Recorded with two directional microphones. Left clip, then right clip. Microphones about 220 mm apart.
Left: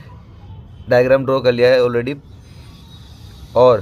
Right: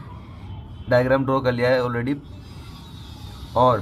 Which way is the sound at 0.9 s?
35° left (ahead or behind).